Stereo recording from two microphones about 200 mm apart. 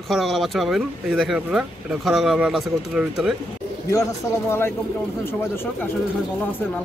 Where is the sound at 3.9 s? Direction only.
15° left (ahead or behind).